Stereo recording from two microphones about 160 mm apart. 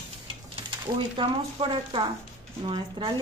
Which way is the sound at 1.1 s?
30° right (ahead or behind).